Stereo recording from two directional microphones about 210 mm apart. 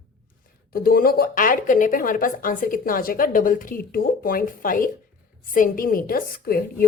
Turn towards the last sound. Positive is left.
turn(degrees=45)  # may be behind; listen again after turning